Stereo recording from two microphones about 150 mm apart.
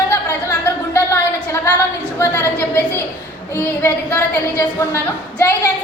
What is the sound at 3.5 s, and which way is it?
A woman's voice, 15° left (ahead or behind).